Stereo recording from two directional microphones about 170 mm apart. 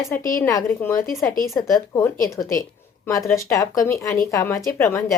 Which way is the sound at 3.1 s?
20° left (ahead or behind).